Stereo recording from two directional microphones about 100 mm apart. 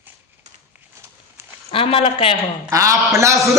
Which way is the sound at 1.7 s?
70° left (ahead or behind).